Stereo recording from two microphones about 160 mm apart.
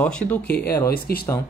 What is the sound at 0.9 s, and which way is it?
Speech, 70° left (ahead or behind).